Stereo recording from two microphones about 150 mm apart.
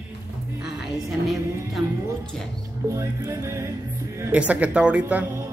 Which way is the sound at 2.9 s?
20° right (ahead or behind).